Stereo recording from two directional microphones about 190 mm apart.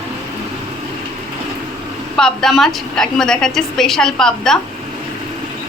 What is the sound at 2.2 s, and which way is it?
A woman's voice, centre (ahead or behind).